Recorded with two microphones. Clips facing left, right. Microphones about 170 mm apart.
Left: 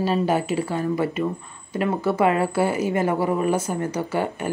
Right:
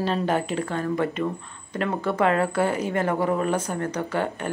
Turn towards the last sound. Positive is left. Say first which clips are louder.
# left 2 dB
turn(degrees=10)  # may be behind; listen again after turning